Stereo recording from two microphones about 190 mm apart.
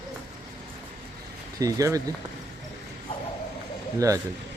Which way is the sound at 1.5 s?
15° right (ahead or behind).